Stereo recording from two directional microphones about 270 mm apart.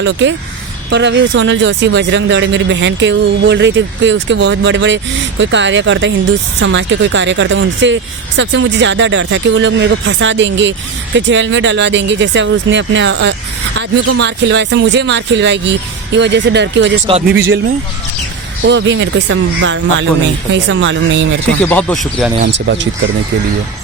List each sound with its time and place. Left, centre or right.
0.0 s speech: right
13.7 s speech: right
14.2 s speech: right
18.6 s speech: right
21.6 s speech: centre
22.5 s speech: right